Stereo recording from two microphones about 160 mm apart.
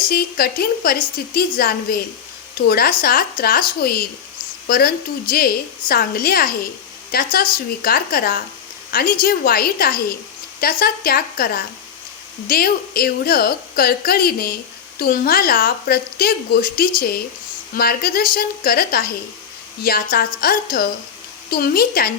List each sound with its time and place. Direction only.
0.1 s a woman's voice: 70° left (ahead or behind)